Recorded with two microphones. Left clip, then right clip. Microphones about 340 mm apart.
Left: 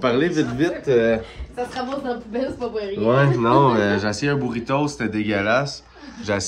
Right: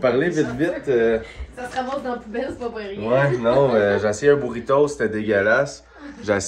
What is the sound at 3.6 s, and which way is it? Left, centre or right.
Speech, centre.